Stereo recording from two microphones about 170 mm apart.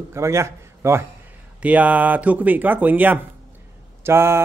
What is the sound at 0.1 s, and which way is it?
A man's voice, 15° right (ahead or behind).